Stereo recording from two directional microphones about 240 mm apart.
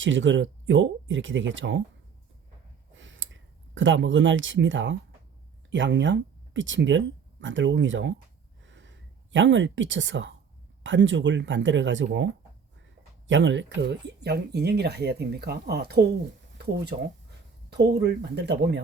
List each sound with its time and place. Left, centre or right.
0.0 s speech: right
2.9 s a sound: right
5.7 s speech: right
8.6 s a sound: right
10.8 s speech: right
17.7 s speech: right